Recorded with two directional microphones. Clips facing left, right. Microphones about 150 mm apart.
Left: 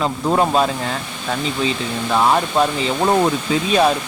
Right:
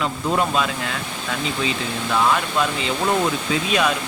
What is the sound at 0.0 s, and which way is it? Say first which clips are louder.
Speech: left 4 dB; 35° left (ahead or behind).